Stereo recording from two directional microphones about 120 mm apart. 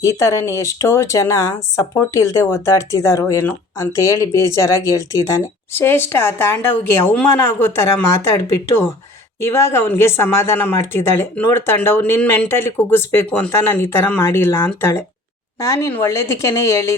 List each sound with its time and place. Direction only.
0.0 s speech: 25° left (ahead or behind)